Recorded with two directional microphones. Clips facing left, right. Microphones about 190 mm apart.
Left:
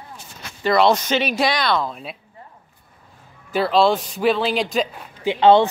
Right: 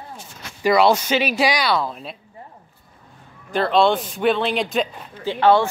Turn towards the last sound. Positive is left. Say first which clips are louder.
# left 3 dB
turn(degrees=20)  # may be behind; listen again after turning